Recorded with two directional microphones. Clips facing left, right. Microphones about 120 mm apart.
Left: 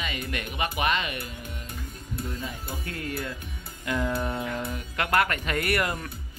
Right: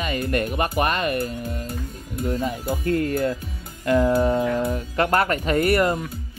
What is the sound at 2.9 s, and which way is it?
Speech, 45° right (ahead or behind).